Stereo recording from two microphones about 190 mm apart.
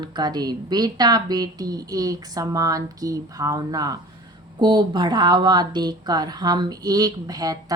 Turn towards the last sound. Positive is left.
turn(degrees=-20)  # may be behind; listen again after turning